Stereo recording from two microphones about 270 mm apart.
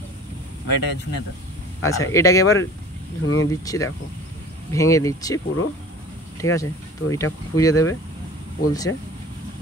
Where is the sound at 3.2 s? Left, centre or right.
Left.